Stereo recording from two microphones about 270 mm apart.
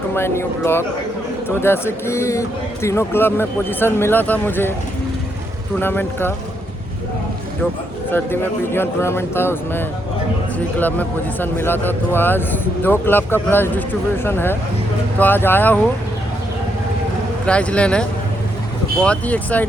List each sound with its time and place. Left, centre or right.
0.1 s a man's voice: centre
5.8 s a man's voice: centre
8.1 s a man's voice: centre
17.4 s speech: centre
19.0 s speech: centre